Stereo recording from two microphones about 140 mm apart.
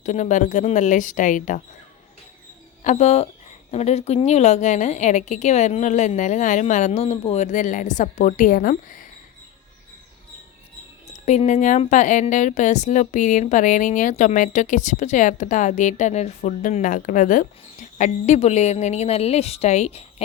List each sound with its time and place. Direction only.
0.0 s speech: 60° left (ahead or behind)
2.8 s speech: 55° left (ahead or behind)
7.4 s a woman's voice: 65° left (ahead or behind)
11.3 s speech: 55° left (ahead or behind)